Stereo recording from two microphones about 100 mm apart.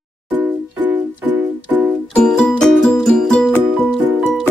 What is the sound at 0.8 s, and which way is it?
Music, 20° right (ahead or behind).